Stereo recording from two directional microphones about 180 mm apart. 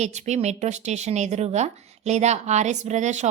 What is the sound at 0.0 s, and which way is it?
A woman's voice, 40° right (ahead or behind).